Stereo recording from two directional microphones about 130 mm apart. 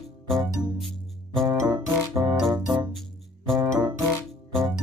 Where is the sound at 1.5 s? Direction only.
30° right (ahead or behind).